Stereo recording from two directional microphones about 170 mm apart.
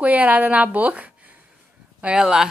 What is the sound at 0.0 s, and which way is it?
A woman's voice, 10° right (ahead or behind).